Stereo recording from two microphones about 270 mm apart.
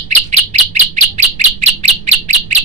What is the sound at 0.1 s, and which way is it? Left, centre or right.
Bird, right.